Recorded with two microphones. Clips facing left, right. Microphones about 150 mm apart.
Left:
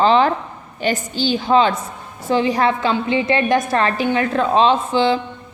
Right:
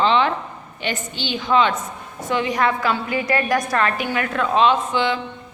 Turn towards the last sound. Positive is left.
turn(degrees=30)  # may be behind; listen again after turning